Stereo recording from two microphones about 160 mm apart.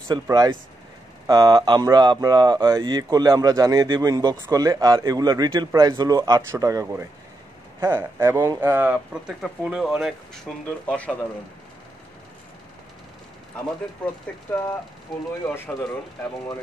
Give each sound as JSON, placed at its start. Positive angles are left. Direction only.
{"t": 0.1, "sound": "speech", "side_deg": -25}
{"t": 15.4, "sound": "speech", "side_deg": 15}